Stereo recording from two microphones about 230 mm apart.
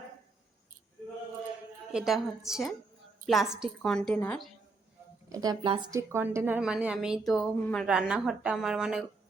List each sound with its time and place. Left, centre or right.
1.9 s a woman's voice: centre
5.3 s a woman's voice: centre